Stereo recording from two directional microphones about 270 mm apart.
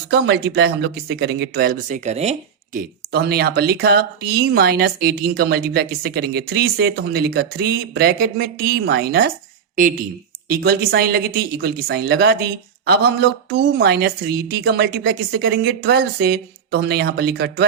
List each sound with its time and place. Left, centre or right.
0.1 s speech: right
2.7 s speech: right
10.5 s speech: right